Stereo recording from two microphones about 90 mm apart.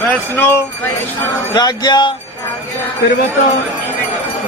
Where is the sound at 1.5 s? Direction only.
50° left (ahead or behind).